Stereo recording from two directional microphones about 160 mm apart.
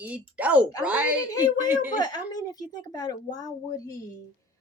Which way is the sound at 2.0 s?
25° left (ahead or behind).